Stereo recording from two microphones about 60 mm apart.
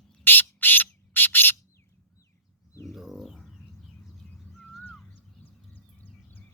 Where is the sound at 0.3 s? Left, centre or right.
Left.